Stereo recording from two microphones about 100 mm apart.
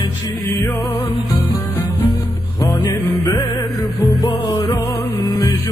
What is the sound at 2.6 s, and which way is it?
Music, 35° left (ahead or behind).